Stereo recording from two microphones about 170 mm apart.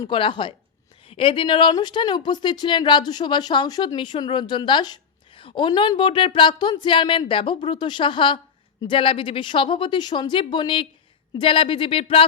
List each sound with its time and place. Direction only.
0.0 s speech: 30° left (ahead or behind)